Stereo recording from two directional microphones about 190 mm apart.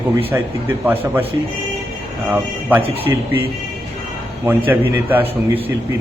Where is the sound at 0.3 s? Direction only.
10° right (ahead or behind).